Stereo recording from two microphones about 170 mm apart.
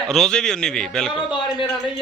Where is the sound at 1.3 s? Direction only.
25° left (ahead or behind).